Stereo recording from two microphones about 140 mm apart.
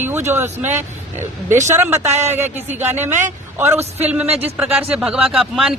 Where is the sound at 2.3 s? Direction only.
15° right (ahead or behind).